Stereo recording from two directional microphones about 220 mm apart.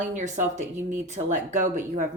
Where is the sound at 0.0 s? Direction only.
35° right (ahead or behind).